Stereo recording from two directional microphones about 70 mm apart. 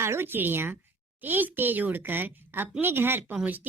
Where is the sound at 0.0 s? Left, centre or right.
Right.